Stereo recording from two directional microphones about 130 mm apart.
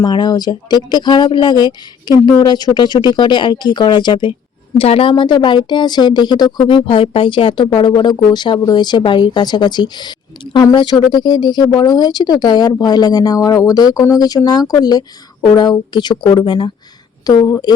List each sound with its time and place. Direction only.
0.0 s a woman's voice: 35° left (ahead or behind)